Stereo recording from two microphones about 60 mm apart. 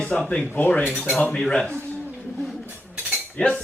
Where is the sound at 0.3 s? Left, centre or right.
Left.